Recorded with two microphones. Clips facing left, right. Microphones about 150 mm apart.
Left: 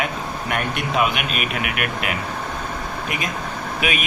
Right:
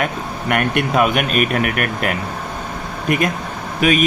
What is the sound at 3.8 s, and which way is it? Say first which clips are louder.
Speech: right 9 dB; 40° right (ahead or behind).